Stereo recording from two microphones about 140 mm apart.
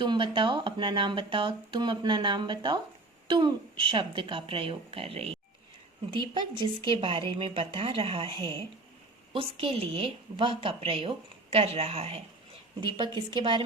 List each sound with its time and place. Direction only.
0.0 s a woman's voice: 35° right (ahead or behind)
12.8 s speech: 35° right (ahead or behind)